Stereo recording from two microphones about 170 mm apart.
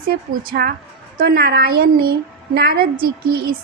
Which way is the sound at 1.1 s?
65° right (ahead or behind).